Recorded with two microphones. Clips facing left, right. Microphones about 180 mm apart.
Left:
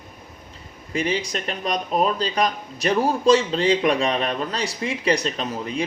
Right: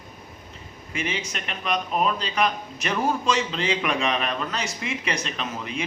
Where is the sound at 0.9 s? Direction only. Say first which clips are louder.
Left 6 dB; 35° left (ahead or behind).